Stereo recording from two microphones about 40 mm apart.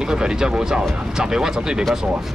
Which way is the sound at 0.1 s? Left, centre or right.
Centre.